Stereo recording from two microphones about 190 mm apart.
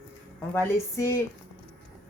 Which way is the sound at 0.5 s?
15° left (ahead or behind).